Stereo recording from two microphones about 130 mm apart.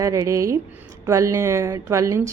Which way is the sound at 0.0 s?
25° right (ahead or behind).